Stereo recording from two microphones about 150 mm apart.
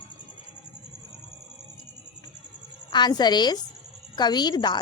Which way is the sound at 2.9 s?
30° left (ahead or behind).